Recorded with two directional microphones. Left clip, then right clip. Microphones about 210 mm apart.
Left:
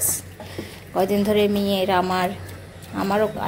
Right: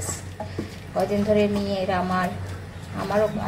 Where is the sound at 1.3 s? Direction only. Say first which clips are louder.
Left 2 dB; 45° left (ahead or behind).